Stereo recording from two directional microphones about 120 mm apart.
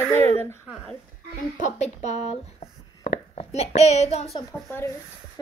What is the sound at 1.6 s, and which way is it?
Speech, 70° left (ahead or behind).